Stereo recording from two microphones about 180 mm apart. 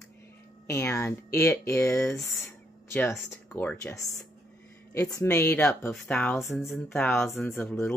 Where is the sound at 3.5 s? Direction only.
10° left (ahead or behind).